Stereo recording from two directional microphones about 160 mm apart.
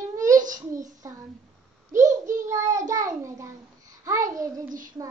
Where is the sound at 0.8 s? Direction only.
20° right (ahead or behind).